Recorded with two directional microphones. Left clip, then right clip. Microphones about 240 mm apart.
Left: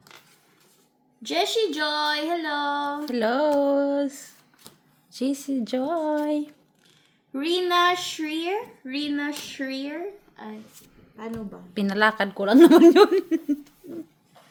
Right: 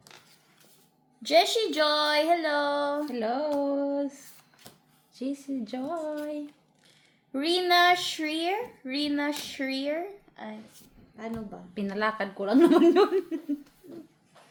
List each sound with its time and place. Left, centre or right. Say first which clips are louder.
1.2 s a child's voice: right 1 dB; centre
3.1 s speech: left 7 dB; left
7.3 s a child's voice: left 1 dB; centre
11.7 s speech: left 8 dB; left